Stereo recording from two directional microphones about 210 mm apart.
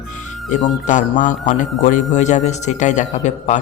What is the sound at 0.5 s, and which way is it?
Speech, 35° left (ahead or behind).